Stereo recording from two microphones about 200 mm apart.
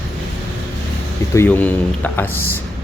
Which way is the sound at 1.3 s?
10° left (ahead or behind).